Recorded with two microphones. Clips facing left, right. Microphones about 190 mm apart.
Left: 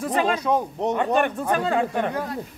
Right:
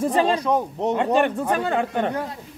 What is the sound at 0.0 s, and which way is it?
Speech, 30° right (ahead or behind).